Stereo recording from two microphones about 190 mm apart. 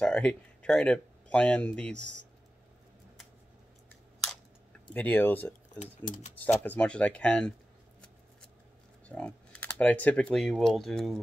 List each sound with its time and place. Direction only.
0.0 s speech: 5° left (ahead or behind)
4.9 s speech: 10° left (ahead or behind)
5.8 s speech: 40° left (ahead or behind)
6.4 s speech: 10° left (ahead or behind)
9.0 s speech: 5° left (ahead or behind)